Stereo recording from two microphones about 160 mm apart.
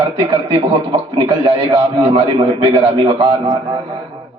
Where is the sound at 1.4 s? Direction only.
30° right (ahead or behind).